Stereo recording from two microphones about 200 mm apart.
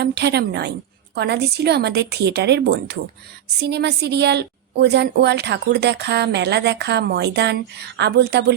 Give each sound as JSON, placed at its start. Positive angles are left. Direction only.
{"t": 0.0, "sound": "a woman's voice", "side_deg": -60}